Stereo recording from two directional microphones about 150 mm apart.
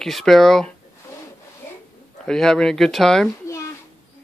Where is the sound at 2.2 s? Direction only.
5° left (ahead or behind).